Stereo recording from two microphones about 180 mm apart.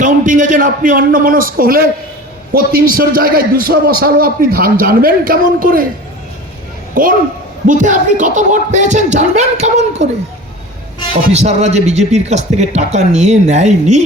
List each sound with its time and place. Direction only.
0.0 s a man's voice: 45° right (ahead or behind)
7.0 s a man's voice: 50° right (ahead or behind)
11.3 s speech: 40° right (ahead or behind)